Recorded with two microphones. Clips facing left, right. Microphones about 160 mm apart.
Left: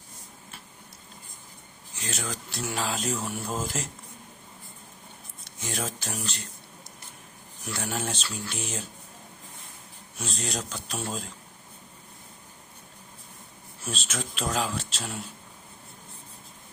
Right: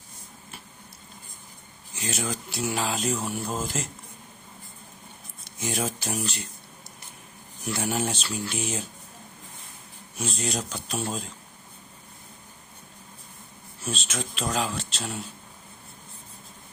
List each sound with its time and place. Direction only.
2.0 s speech: 10° right (ahead or behind)
5.5 s speech: 10° right (ahead or behind)
7.7 s speech: 10° right (ahead or behind)
10.2 s speech: centre (ahead or behind)
13.8 s speech: 5° left (ahead or behind)